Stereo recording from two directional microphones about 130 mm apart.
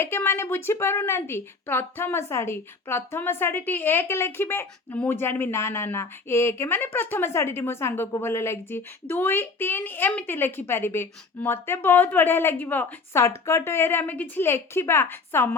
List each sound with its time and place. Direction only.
0.0 s a woman's voice: 20° left (ahead or behind)